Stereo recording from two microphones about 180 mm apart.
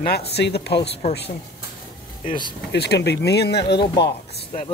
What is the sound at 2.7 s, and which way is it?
Speech, 65° left (ahead or behind).